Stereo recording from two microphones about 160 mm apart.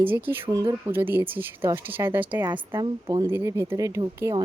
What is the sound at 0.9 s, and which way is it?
Speech, 15° right (ahead or behind).